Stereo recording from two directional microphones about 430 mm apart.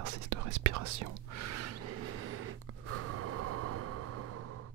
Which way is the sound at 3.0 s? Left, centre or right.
Right.